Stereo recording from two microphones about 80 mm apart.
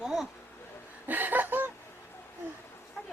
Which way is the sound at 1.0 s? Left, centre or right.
Right.